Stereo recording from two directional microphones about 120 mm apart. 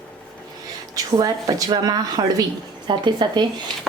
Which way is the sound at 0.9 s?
30° right (ahead or behind).